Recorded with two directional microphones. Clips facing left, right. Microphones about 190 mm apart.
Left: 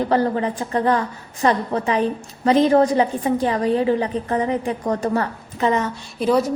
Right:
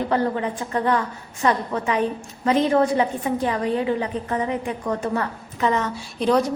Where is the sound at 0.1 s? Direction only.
35° left (ahead or behind).